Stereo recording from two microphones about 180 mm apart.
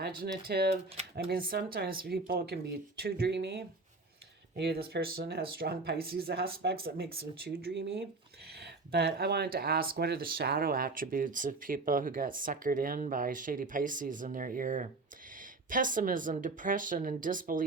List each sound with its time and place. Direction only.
0.0 s speech: 60° right (ahead or behind)